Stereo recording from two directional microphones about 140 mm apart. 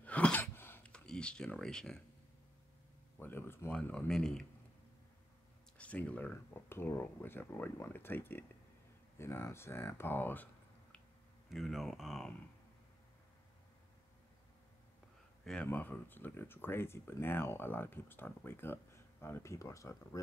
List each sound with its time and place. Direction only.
0.0 s a sound: 10° left (ahead or behind)
3.2 s speech: 15° left (ahead or behind)
5.8 s speech: 10° left (ahead or behind)
11.4 s speech: centre (ahead or behind)
15.4 s speech: 10° left (ahead or behind)